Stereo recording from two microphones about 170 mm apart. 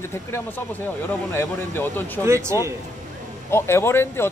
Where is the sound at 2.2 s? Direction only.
15° right (ahead or behind).